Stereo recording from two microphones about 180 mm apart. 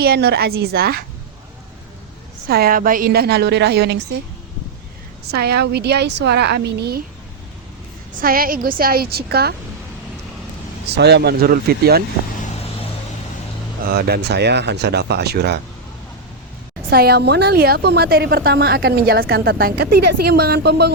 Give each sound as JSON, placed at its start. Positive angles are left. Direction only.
{"t": 0.0, "sound": "a woman's voice", "side_deg": -65}
{"t": 2.5, "sound": "a woman's voice", "side_deg": -55}
{"t": 5.3, "sound": "speech", "side_deg": -65}
{"t": 8.1, "sound": "a woman's voice", "side_deg": -55}
{"t": 10.8, "sound": "a woman's voice", "side_deg": -65}
{"t": 13.8, "sound": "speech", "side_deg": -60}
{"t": 16.9, "sound": "a woman's voice", "side_deg": -60}